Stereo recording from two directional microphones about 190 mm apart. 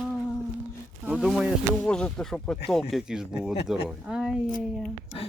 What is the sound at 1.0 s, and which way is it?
Speech, centre (ahead or behind).